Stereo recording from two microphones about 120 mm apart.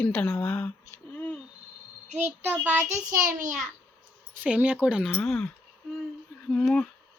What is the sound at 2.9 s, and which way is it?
Child singing, 90° right.